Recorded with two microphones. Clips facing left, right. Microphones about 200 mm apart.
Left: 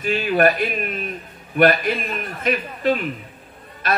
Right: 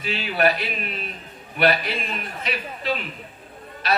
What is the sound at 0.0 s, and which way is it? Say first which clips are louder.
A man's voice: left 5 dB; 50° left (ahead or behind).